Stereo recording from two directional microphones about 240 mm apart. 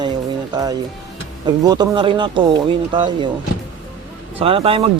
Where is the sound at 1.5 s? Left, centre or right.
Centre.